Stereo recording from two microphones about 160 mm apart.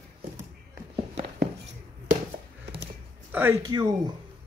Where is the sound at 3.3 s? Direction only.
10° right (ahead or behind).